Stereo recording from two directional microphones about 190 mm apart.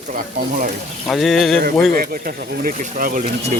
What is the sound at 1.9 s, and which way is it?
Speech, 50° right (ahead or behind).